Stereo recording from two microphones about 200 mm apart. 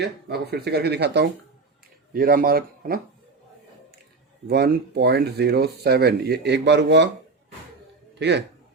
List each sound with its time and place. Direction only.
0.0 s a man's voice: 50° right (ahead or behind)
4.4 s speech: 55° right (ahead or behind)
8.2 s speech: 60° right (ahead or behind)